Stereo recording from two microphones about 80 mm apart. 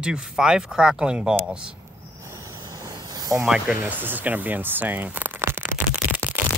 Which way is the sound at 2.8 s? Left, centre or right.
Right.